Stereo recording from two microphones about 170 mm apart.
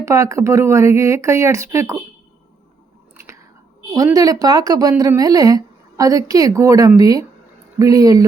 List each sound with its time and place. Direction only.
0.0 s speech: 20° right (ahead or behind)
3.9 s speech: 20° right (ahead or behind)